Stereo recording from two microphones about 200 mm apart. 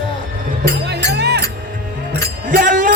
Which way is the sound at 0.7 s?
55° right (ahead or behind).